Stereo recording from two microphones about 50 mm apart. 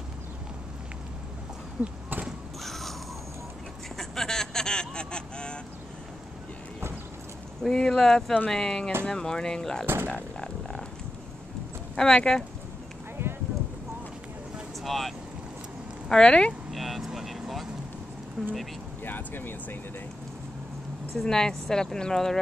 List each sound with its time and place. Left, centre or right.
1.8 s a sound: centre
2.6 s a sound: centre
7.6 s speech: centre
10.0 s a sound: centre
11.9 s speech: centre
13.2 s a sound: right
14.8 s speech: centre
16.1 s speech: centre
16.7 s vehicle: centre
18.4 s speech: centre
19.0 s speech: left
21.2 s speech: centre